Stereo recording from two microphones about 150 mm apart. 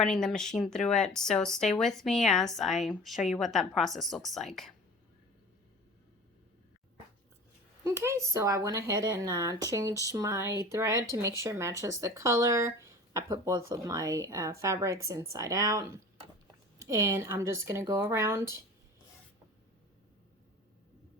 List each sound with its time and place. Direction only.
0.0 s speech: 5° left (ahead or behind)
7.9 s speech: 20° right (ahead or behind)